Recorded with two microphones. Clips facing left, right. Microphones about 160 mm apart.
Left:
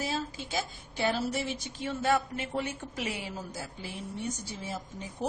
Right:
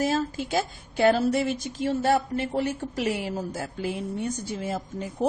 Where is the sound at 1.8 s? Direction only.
40° right (ahead or behind).